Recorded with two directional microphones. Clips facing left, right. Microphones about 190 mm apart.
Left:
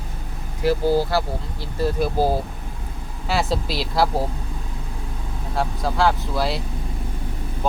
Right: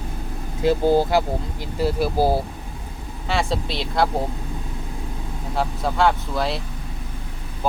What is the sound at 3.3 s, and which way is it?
Speech, 5° left (ahead or behind).